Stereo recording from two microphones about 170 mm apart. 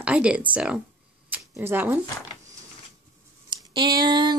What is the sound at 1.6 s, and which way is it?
Speech, 10° right (ahead or behind).